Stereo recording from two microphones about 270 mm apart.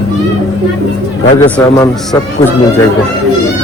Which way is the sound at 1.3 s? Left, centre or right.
Centre.